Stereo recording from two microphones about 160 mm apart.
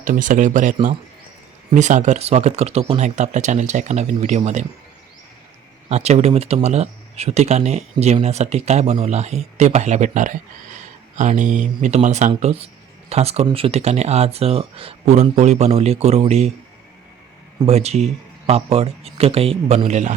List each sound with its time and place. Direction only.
0.0 s speech: 55° right (ahead or behind)
5.9 s speech: 40° right (ahead or behind)
17.7 s speech: 40° right (ahead or behind)